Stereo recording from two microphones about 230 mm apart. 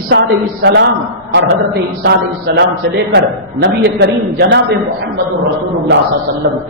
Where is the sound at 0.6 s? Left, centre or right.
Right.